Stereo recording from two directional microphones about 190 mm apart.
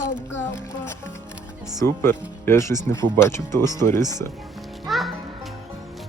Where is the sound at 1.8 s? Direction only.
15° left (ahead or behind).